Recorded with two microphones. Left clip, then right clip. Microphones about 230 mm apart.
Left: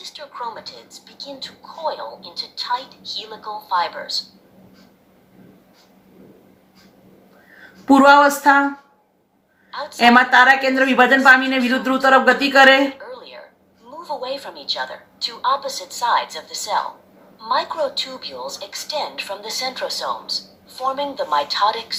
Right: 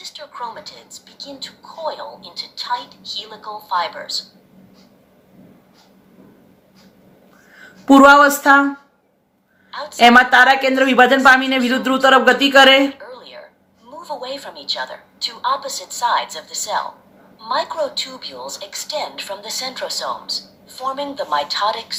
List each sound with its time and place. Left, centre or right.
0.0 s speech: centre
7.9 s a woman's voice: right
9.7 s speech: centre
10.0 s a woman's voice: right
13.0 s a sound: centre
13.9 s speech: centre